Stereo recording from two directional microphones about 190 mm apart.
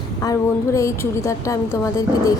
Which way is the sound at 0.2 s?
15° left (ahead or behind).